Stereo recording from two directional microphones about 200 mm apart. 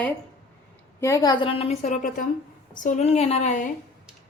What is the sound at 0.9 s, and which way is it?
A woman's voice, 15° left (ahead or behind).